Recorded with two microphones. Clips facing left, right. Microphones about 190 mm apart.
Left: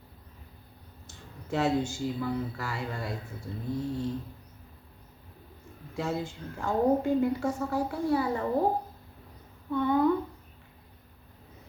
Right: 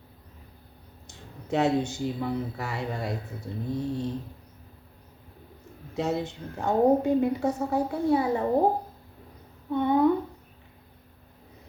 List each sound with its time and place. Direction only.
1.0 s speech: 20° right (ahead or behind)
5.9 s speech: 20° right (ahead or behind)
9.7 s speech: 20° right (ahead or behind)